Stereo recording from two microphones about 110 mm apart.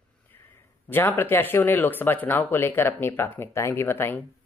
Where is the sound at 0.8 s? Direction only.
20° left (ahead or behind).